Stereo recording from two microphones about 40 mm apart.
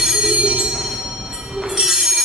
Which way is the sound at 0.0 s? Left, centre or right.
Centre.